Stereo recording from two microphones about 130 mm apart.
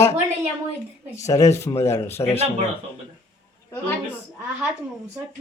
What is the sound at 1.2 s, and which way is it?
A man's voice, 25° left (ahead or behind).